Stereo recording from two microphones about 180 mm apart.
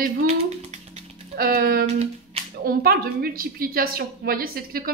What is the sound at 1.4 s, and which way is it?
Speech, 55° right (ahead or behind).